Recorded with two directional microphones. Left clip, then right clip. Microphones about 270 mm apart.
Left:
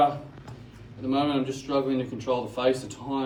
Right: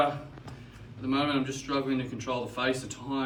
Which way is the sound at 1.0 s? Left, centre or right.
Centre.